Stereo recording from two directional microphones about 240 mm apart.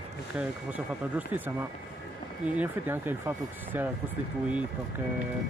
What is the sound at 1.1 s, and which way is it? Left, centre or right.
Speech, centre.